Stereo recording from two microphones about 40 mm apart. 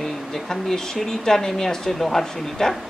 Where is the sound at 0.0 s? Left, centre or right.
Centre.